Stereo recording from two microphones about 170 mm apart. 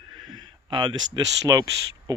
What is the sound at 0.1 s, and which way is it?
Speech, 25° right (ahead or behind).